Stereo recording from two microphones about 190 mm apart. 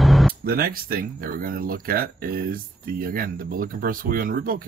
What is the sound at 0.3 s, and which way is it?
Speech, 50° right (ahead or behind).